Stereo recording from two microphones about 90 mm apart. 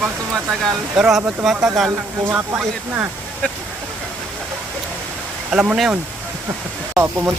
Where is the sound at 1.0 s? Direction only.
5° right (ahead or behind).